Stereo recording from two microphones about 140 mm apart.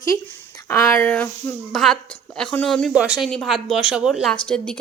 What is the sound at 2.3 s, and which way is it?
A woman's voice, 5° left (ahead or behind).